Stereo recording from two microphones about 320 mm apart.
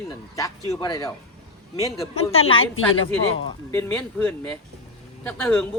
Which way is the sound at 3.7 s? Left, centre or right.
Centre.